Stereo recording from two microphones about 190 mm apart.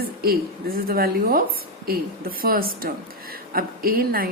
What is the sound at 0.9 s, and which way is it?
A woman's voice, 50° right (ahead or behind).